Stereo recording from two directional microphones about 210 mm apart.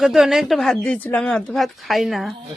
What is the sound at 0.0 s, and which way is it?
Speech, centre (ahead or behind).